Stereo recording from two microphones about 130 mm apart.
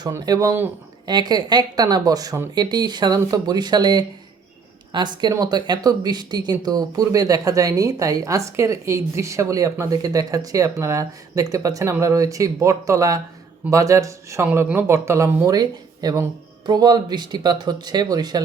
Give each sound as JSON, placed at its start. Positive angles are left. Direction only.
{"t": 0.1, "sound": "speech", "side_deg": -25}